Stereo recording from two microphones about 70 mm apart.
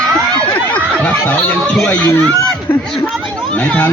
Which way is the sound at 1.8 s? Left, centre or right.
Centre.